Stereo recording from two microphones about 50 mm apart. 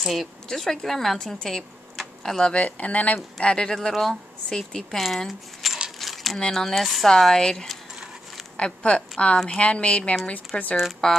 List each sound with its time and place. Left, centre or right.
0.0 s speech: centre
2.5 s speech: left
3.3 s speech: centre
5.9 s a sound: centre
6.5 s speech: centre
8.5 s speech: left
11.0 s speech: centre